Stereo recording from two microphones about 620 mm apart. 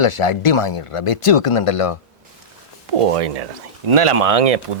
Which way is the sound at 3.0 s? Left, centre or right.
Right.